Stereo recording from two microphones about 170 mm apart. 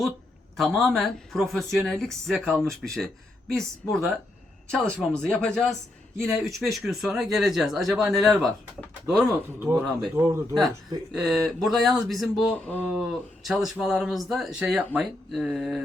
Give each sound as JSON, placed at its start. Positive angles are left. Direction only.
{"t": 0.5, "sound": "speech", "side_deg": 0}
{"t": 4.7, "sound": "speech", "side_deg": 5}
{"t": 9.6, "sound": "a man's voice", "side_deg": -15}
{"t": 10.5, "sound": "speech", "side_deg": 0}